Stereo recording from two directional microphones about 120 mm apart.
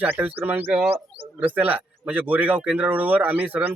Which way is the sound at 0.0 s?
15° right (ahead or behind).